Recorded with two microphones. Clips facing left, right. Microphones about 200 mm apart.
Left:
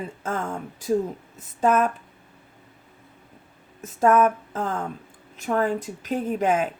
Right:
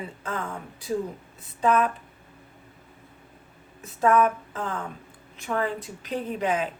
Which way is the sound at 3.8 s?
45° left (ahead or behind).